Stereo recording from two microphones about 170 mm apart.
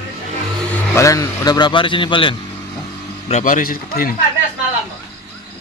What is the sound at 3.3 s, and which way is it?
Speech, 50° left (ahead or behind).